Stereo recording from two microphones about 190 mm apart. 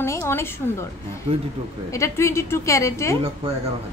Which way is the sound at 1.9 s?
15° left (ahead or behind).